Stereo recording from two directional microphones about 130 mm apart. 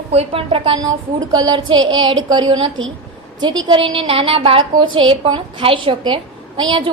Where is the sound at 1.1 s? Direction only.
30° right (ahead or behind).